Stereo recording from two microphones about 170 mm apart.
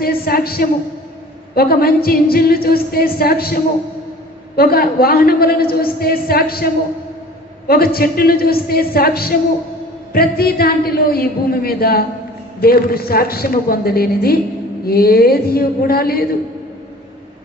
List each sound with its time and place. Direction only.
0.0 s a woman's voice: 60° left (ahead or behind)
1.5 s music: 65° left (ahead or behind)